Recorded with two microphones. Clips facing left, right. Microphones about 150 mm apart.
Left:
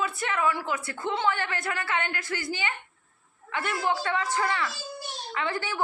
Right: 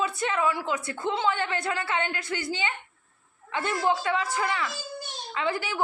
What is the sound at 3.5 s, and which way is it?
A woman's voice, 20° right (ahead or behind).